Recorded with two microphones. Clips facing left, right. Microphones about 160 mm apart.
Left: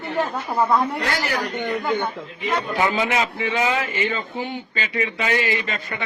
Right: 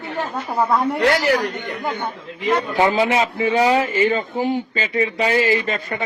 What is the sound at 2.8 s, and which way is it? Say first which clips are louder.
A man's voice: right 4 dB; 30° right (ahead or behind).